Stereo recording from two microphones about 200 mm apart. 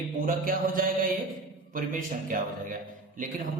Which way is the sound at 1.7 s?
40° right (ahead or behind).